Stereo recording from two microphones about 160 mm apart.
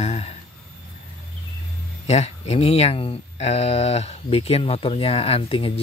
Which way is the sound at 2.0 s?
40° left (ahead or behind).